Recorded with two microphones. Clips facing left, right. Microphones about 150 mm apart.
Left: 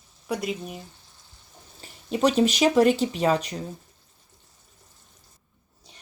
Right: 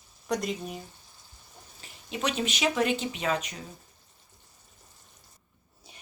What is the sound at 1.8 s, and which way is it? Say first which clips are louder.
Speech: left 9 dB; 35° left (ahead or behind).